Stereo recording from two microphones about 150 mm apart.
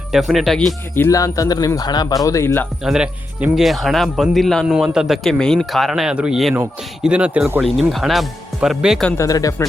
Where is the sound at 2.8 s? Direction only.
5° right (ahead or behind).